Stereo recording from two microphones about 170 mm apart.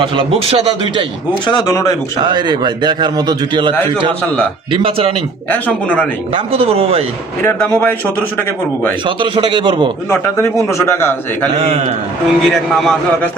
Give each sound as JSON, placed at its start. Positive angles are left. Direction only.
{"t": 0.0, "sound": "a man's voice", "side_deg": -30}
{"t": 1.6, "sound": "speech", "side_deg": 20}
{"t": 2.2, "sound": "a man's voice", "side_deg": -25}
{"t": 4.7, "sound": "speech", "side_deg": -30}
{"t": 5.5, "sound": "a man's voice", "side_deg": 10}
{"t": 6.3, "sound": "speech", "side_deg": -35}
{"t": 7.4, "sound": "a man's voice", "side_deg": 10}
{"t": 9.0, "sound": "a man's voice", "side_deg": -30}
{"t": 10.1, "sound": "a man's voice", "side_deg": 15}
{"t": 11.5, "sound": "speech", "side_deg": -35}
{"t": 12.4, "sound": "a man's voice", "side_deg": 0}